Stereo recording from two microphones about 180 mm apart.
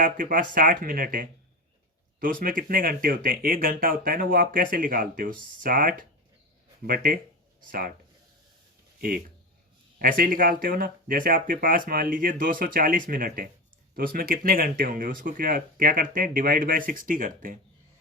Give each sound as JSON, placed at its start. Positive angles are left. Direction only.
{"t": 0.0, "sound": "speech", "side_deg": -50}
{"t": 9.0, "sound": "speech", "side_deg": -55}